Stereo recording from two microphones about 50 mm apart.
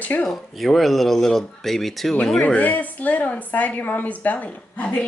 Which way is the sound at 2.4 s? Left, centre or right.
Left.